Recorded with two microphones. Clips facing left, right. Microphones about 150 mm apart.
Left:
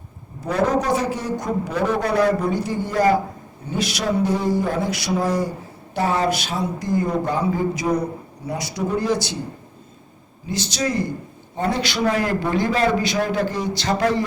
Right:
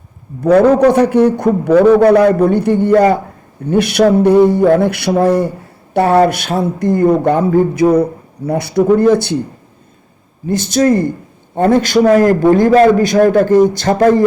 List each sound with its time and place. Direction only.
0.4 s a man's voice: 65° right (ahead or behind)
10.4 s a man's voice: 50° right (ahead or behind)